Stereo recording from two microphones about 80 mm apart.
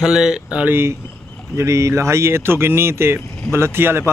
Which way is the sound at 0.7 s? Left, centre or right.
Right.